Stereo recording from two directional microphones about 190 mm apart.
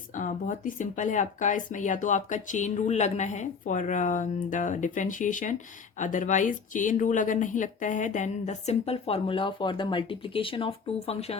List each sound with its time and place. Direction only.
0.1 s speech: 40° left (ahead or behind)